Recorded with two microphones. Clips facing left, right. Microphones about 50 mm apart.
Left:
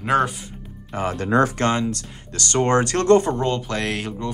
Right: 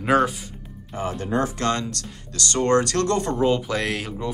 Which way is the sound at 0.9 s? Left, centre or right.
Left.